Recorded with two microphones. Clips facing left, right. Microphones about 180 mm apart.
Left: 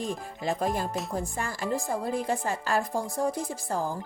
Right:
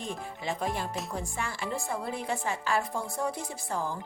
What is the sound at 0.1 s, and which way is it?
A woman's voice, 40° left (ahead or behind).